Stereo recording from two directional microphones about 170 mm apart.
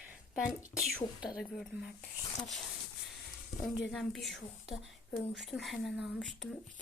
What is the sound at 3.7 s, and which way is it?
Speech, centre (ahead or behind).